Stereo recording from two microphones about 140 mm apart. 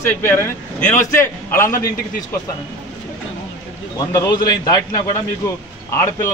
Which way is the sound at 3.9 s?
25° left (ahead or behind).